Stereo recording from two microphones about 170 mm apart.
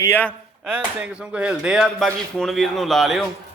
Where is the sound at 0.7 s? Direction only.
10° right (ahead or behind).